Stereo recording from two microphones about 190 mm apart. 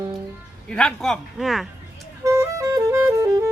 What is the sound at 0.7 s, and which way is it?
Speech, 5° left (ahead or behind).